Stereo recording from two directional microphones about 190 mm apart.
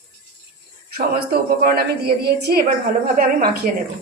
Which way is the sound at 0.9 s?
55° right (ahead or behind).